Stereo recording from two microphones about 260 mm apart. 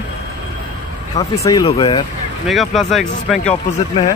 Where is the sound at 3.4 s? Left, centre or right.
Left.